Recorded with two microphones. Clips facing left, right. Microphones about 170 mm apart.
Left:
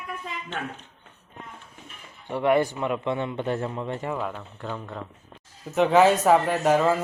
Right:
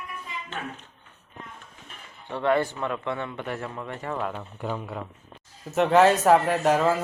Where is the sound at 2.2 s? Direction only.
15° left (ahead or behind).